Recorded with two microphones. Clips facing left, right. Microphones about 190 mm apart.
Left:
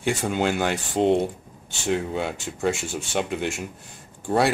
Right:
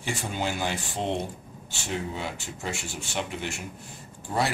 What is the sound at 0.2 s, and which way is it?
Speech, 65° left (ahead or behind).